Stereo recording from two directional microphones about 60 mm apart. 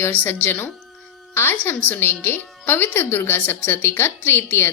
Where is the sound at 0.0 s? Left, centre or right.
Left.